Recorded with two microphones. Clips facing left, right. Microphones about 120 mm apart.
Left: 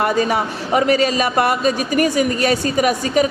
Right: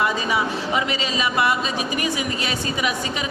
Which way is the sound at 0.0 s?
50° left (ahead or behind).